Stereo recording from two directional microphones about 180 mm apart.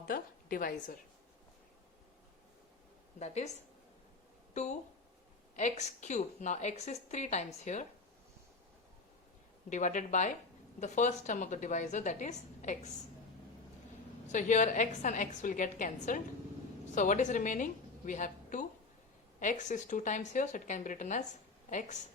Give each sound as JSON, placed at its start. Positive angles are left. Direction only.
{"t": 0.1, "sound": "a woman's voice", "side_deg": 50}
{"t": 3.2, "sound": "a woman's voice", "side_deg": 40}
{"t": 4.5, "sound": "a woman's voice", "side_deg": 40}
{"t": 9.6, "sound": "a woman's voice", "side_deg": 45}
{"t": 14.3, "sound": "a woman's voice", "side_deg": 45}